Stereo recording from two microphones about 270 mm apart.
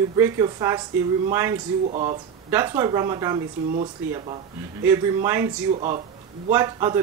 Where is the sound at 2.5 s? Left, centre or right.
Centre.